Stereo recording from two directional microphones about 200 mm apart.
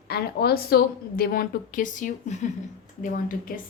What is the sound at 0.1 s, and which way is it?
A woman's voice, 50° left (ahead or behind).